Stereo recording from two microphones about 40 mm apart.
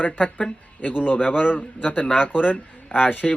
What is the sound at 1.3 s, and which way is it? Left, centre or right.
Speech, left.